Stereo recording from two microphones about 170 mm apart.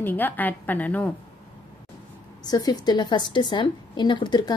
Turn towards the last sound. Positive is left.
turn(degrees=25)  # may be behind; listen again after turning